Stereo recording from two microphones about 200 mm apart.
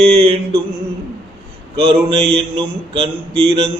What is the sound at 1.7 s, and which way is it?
Speech, 25° right (ahead or behind).